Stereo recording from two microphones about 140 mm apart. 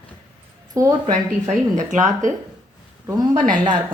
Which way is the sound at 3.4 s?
65° right (ahead or behind).